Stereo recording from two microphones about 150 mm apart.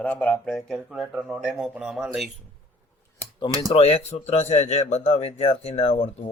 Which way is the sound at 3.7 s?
40° left (ahead or behind).